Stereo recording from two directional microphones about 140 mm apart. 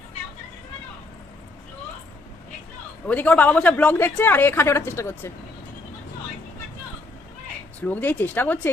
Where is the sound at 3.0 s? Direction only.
10° left (ahead or behind).